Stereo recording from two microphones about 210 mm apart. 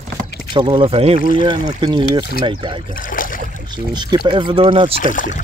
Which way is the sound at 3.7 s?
20° right (ahead or behind).